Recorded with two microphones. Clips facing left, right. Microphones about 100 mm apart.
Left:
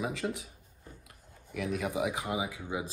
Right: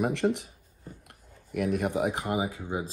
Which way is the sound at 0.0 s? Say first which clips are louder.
Right 8 dB; 60° right (ahead or behind).